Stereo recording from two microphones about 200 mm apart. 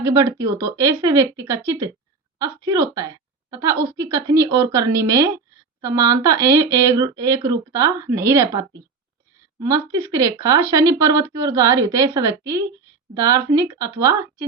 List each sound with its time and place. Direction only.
0.0 s a woman's voice: 15° right (ahead or behind)